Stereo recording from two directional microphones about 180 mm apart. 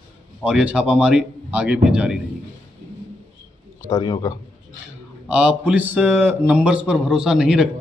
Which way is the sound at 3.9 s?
20° left (ahead or behind).